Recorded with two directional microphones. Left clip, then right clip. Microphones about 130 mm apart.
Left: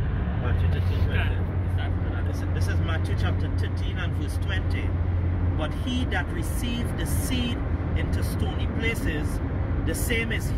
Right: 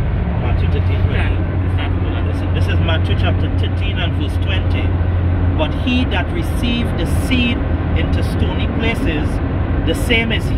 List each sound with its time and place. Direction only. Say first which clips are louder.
5.9 s speech: right 8 dB; 40° right (ahead or behind)
9.8 s speech: right 11 dB; 40° right (ahead or behind)